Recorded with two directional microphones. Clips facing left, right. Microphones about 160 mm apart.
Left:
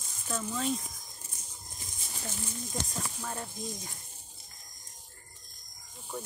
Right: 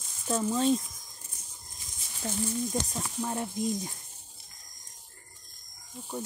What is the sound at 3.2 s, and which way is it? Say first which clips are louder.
Speech: right 9 dB; 20° right (ahead or behind).